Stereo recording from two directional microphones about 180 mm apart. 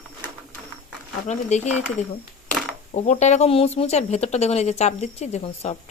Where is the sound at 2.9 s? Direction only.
40° left (ahead or behind).